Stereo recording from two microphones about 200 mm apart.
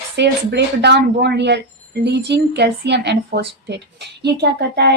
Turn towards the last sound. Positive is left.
turn(degrees=-55)  # may be behind; listen again after turning